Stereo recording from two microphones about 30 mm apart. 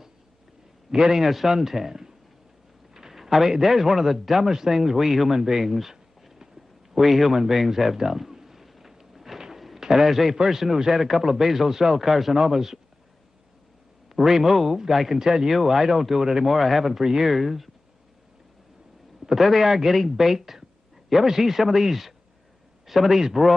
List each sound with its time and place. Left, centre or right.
0.9 s speech: centre
1.2 s speech: centre
2.9 s a sound: centre
3.5 s speech: centre
5.3 s a sound: centre
10.3 s speech: centre
14.0 s a man's voice: centre
15.1 s speech: centre
15.5 s speech: centre
19.4 s speech: centre